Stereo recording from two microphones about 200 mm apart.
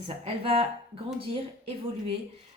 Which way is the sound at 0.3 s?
30° right (ahead or behind).